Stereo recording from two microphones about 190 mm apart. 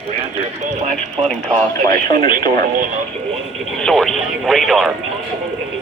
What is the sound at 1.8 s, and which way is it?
Speech, 20° left (ahead or behind).